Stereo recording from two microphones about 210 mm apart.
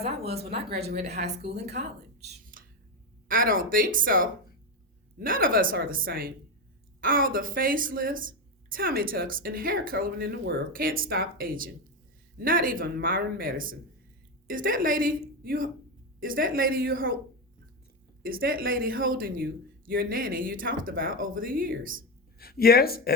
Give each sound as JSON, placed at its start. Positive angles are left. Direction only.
{"t": 0.0, "sound": "speech", "side_deg": -30}
{"t": 1.2, "sound": "speech", "side_deg": -50}
{"t": 2.2, "sound": "a sound", "side_deg": -40}
{"t": 3.2, "sound": "speech", "side_deg": -40}
{"t": 18.2, "sound": "speech", "side_deg": -45}
{"t": 22.4, "sound": "speech", "side_deg": 45}